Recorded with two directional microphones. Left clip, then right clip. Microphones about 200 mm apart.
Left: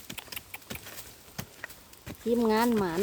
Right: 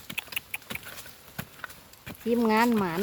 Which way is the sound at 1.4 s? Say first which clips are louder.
Right 2 dB; 15° left (ahead or behind).